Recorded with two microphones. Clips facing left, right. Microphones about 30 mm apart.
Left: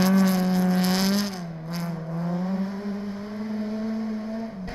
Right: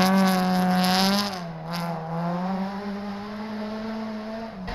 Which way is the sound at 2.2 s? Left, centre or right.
Right.